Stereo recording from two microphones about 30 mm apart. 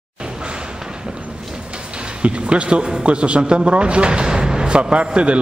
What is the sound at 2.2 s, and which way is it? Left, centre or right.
A man's voice, right.